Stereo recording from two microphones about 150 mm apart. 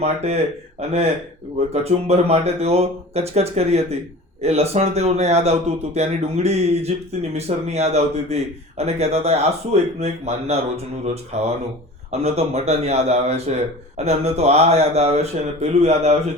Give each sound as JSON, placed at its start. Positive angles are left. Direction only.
{"t": 0.0, "sound": "speech", "side_deg": -45}